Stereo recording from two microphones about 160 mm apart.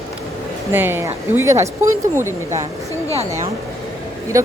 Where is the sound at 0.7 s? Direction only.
15° right (ahead or behind).